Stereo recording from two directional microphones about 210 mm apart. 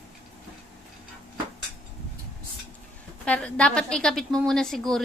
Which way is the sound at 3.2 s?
5° left (ahead or behind).